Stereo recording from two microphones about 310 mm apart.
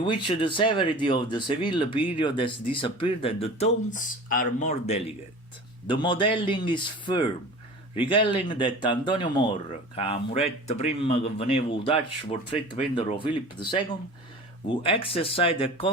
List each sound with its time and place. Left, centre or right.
0.0 s speech: centre